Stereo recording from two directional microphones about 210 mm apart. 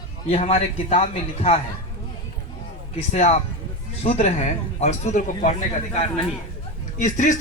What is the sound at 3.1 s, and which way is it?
Speech, 30° left (ahead or behind).